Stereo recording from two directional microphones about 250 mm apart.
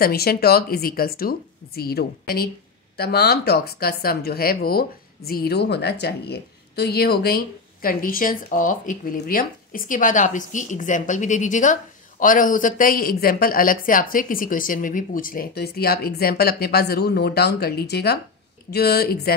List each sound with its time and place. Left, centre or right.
0.0 s speech: left